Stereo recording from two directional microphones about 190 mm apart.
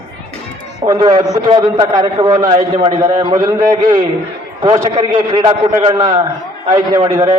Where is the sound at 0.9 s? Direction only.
25° right (ahead or behind).